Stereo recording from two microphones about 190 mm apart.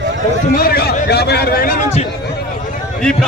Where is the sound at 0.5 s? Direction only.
55° left (ahead or behind); by 2.0 s 40° left (ahead or behind).